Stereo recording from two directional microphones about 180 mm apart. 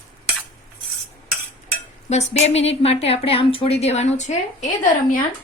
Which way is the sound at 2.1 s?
40° left (ahead or behind).